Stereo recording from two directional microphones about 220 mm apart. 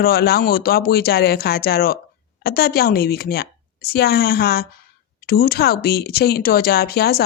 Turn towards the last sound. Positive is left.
turn(degrees=45)  # may be behind; listen again after turning